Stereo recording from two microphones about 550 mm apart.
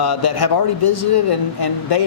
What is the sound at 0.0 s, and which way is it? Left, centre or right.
A man's voice, left.